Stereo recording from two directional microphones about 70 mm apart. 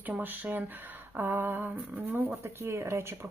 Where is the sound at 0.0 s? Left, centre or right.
Right.